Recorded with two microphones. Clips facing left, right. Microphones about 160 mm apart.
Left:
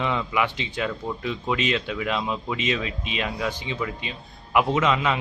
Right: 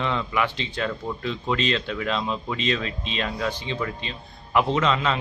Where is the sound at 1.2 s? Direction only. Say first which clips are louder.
Even; 15° left (ahead or behind).